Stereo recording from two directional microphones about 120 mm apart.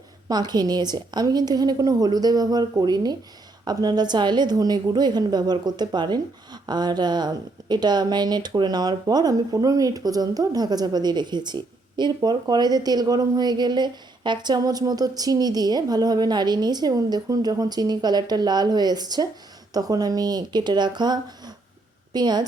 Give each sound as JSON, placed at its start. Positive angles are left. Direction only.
{"t": 0.3, "sound": "a woman's voice", "side_deg": -35}